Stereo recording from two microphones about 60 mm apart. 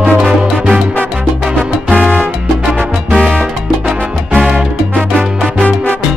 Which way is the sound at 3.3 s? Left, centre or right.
Centre.